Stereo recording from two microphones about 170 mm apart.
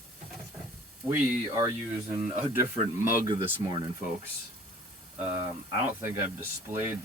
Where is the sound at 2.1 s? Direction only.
35° right (ahead or behind).